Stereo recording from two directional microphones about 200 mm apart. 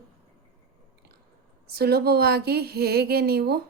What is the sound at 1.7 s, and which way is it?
A woman's voice, 50° right (ahead or behind).